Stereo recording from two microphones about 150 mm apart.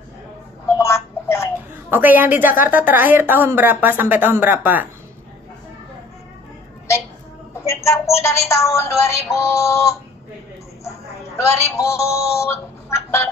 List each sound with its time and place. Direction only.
0.7 s telephone: 20° left (ahead or behind)
1.9 s speech: 10° right (ahead or behind)
7.5 s a sound: 20° left (ahead or behind)
8.2 s speech: 20° left (ahead or behind)
11.4 s speech: 20° left (ahead or behind)